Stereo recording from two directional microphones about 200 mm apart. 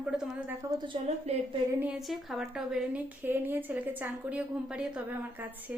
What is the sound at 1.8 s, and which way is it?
A woman's voice, 5° right (ahead or behind).